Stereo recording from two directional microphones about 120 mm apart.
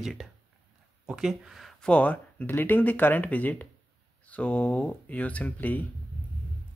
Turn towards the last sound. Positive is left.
turn(degrees=15)  # may be behind; listen again after turning